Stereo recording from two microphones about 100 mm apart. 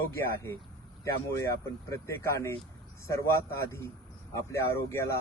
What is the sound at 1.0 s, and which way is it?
A man's voice, 30° left (ahead or behind).